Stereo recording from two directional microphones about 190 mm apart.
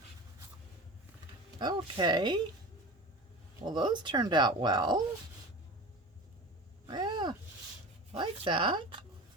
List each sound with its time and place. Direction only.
1.5 s speech: 20° right (ahead or behind)
3.6 s speech: 25° right (ahead or behind)
6.8 s a sound: 25° right (ahead or behind)
8.1 s speech: 25° right (ahead or behind)